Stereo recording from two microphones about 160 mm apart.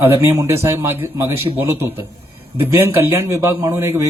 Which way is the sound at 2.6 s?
15° right (ahead or behind).